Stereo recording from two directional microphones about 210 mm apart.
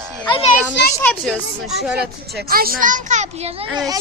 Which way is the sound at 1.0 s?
5° left (ahead or behind).